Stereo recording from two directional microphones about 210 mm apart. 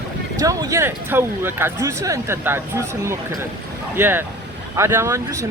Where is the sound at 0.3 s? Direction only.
15° right (ahead or behind).